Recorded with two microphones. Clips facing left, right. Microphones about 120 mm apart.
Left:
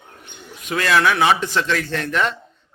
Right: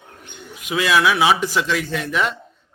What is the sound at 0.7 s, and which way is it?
Speech, 10° right (ahead or behind).